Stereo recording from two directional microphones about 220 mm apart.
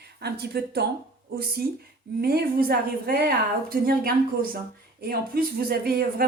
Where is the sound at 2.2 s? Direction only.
45° right (ahead or behind).